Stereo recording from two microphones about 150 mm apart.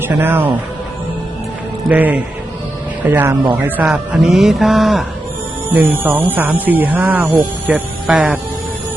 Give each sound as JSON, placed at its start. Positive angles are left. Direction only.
{"t": 0.2, "sound": "speech", "side_deg": -15}
{"t": 1.9, "sound": "speech", "side_deg": -10}
{"t": 5.6, "sound": "speech", "side_deg": -10}